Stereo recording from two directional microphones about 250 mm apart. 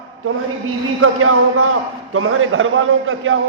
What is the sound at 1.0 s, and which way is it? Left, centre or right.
A man's voice, right.